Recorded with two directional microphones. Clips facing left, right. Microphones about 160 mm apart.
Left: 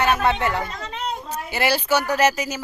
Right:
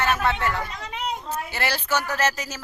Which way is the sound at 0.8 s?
10° right (ahead or behind).